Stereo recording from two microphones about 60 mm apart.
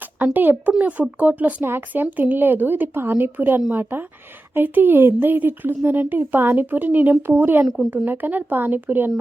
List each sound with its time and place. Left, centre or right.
0.3 s speech: right